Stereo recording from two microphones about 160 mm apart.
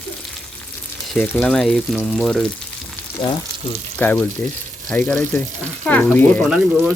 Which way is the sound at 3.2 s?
25° left (ahead or behind).